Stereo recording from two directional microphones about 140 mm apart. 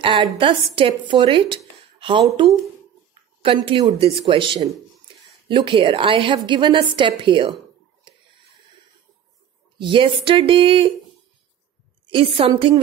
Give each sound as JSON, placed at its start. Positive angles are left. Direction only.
{"t": 0.0, "sound": "a woman's voice", "side_deg": -35}
{"t": 2.0, "sound": "a sound", "side_deg": -40}
{"t": 3.4, "sound": "a woman's voice", "side_deg": -40}
{"t": 8.1, "sound": "a sound", "side_deg": -35}
{"t": 9.8, "sound": "a woman's voice", "side_deg": -35}
{"t": 12.1, "sound": "a woman's voice", "side_deg": -40}